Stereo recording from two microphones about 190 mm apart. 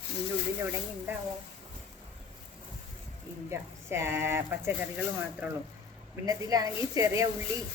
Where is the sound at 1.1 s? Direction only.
10° right (ahead or behind).